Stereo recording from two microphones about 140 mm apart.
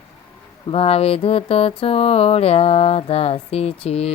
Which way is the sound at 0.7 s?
45° left (ahead or behind).